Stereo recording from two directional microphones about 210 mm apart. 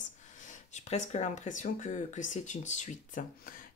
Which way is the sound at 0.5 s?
35° left (ahead or behind).